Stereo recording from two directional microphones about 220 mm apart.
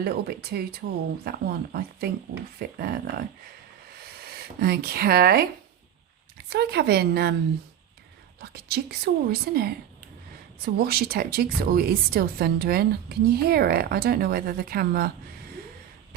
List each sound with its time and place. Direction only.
0.0 s a woman's voice: 45° right (ahead or behind)
4.3 s speech: 45° right (ahead or behind)
6.5 s a woman's voice: 45° right (ahead or behind)
8.4 s a woman's voice: 45° right (ahead or behind)
10.8 s a woman's voice: 45° right (ahead or behind)